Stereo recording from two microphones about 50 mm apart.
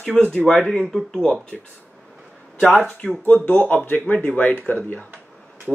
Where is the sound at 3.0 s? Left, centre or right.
Centre.